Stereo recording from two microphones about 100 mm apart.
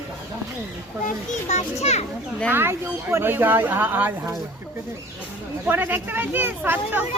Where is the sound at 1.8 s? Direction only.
90° left.